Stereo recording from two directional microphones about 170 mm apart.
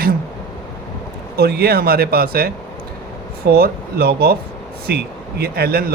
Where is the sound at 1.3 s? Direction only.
65° right (ahead or behind).